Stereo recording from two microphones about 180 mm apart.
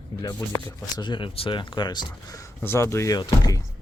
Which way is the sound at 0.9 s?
25° left (ahead or behind).